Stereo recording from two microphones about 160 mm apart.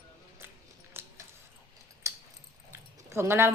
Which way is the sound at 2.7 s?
15° right (ahead or behind).